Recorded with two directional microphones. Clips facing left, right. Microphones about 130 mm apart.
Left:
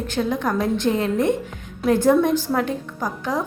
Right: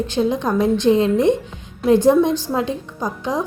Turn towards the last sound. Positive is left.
turn(degrees=-20)  # may be behind; listen again after turning